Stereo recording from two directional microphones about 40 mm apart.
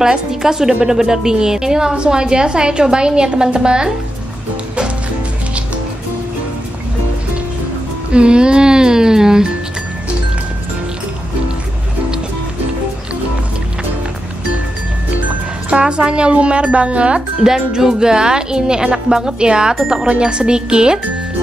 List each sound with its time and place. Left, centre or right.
0.0 s a woman's voice: centre
8.1 s a woman's voice: right
15.7 s a woman's voice: right
17.4 s a woman's voice: centre